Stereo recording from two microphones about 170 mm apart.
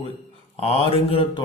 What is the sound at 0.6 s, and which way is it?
Speech, 35° left (ahead or behind).